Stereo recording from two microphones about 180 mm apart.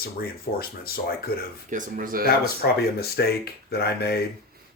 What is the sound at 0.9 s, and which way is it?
Speech, 55° left (ahead or behind).